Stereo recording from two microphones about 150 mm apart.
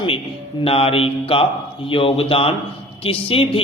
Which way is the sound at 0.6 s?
40° left (ahead or behind).